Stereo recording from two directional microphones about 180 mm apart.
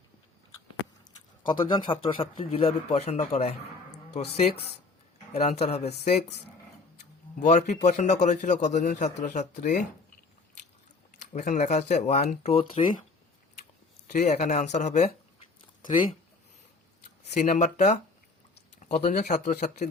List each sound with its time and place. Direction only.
1.5 s a man's voice: 25° left (ahead or behind)
5.4 s a man's voice: 35° left (ahead or behind)
7.3 s a man's voice: 45° left (ahead or behind)
11.3 s a man's voice: 40° left (ahead or behind)
14.1 s a man's voice: 40° left (ahead or behind)
17.3 s a man's voice: 40° left (ahead or behind)